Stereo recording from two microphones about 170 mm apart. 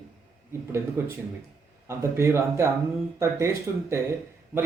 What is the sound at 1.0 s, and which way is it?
A man's voice, 15° right (ahead or behind).